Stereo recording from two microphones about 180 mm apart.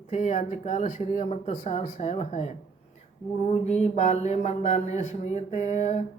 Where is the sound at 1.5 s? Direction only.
45° left (ahead or behind).